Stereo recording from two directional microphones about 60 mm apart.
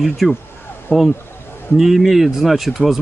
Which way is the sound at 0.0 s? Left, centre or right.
Centre.